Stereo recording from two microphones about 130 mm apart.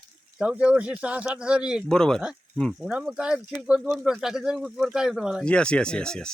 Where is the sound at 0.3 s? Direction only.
5° right (ahead or behind).